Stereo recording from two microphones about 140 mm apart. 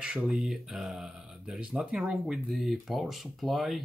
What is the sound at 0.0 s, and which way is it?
Speech, 5° right (ahead or behind).